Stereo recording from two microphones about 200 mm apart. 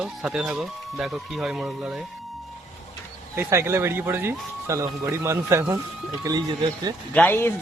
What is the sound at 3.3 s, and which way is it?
Speech, 15° right (ahead or behind).